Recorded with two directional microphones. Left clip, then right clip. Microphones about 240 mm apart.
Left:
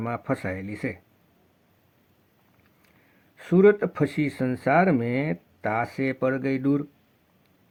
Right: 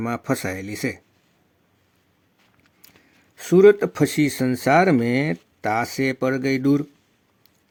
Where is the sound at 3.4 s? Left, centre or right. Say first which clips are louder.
Right 5 dB; right.